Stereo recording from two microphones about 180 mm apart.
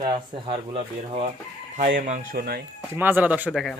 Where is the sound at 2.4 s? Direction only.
60° right (ahead or behind).